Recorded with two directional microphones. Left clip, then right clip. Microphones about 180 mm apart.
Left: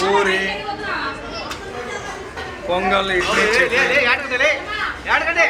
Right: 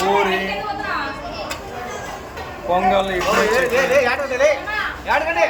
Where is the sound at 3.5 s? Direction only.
45° right (ahead or behind).